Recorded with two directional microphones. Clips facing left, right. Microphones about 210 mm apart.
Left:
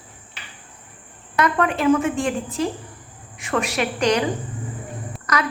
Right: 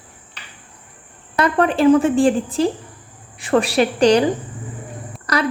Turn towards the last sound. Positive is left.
turn(degrees=-35)  # may be behind; listen again after turning